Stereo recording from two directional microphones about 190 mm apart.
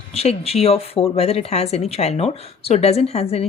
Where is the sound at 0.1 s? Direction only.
30° left (ahead or behind).